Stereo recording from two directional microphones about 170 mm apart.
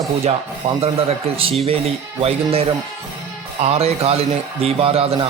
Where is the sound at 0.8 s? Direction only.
35° right (ahead or behind).